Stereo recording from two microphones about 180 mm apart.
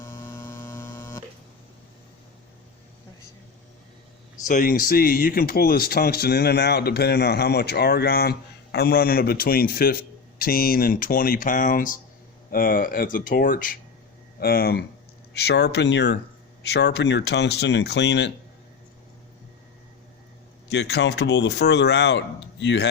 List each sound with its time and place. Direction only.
0.0 s hum: 15° left (ahead or behind)
4.4 s speech: 50° left (ahead or behind); by 18.3 s 75° left (ahead or behind)
20.7 s speech: 70° left (ahead or behind)